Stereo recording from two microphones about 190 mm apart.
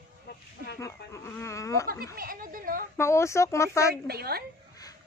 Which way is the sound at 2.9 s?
15° left (ahead or behind).